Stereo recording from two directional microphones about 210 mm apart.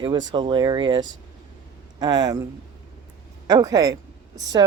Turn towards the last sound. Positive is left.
turn(degrees=-20)  # may be behind; listen again after turning